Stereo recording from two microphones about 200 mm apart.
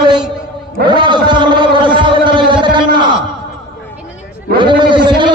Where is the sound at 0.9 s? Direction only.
25° right (ahead or behind).